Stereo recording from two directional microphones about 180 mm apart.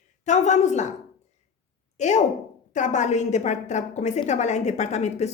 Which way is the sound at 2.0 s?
40° left (ahead or behind).